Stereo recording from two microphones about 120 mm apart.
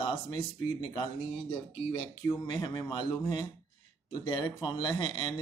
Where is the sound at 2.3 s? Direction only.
35° left (ahead or behind).